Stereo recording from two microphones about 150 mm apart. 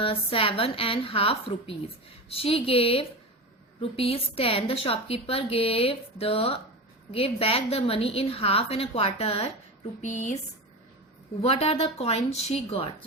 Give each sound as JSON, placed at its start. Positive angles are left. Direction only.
{"t": 0.0, "sound": "a woman's voice", "side_deg": 35}
{"t": 10.0, "sound": "a woman's voice", "side_deg": 55}
{"t": 11.4, "sound": "a woman's voice", "side_deg": 40}